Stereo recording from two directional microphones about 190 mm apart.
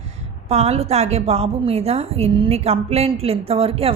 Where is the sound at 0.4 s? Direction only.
35° right (ahead or behind).